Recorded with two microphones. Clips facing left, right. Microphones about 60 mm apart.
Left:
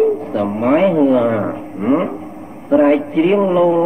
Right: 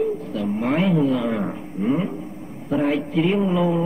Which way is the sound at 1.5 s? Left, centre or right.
Left.